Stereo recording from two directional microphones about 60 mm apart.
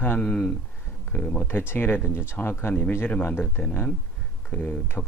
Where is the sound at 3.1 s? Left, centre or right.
Left.